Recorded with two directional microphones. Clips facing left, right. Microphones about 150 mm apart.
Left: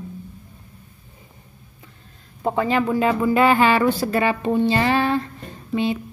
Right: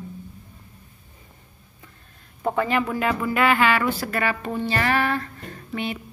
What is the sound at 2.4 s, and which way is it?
Speech, 20° left (ahead or behind).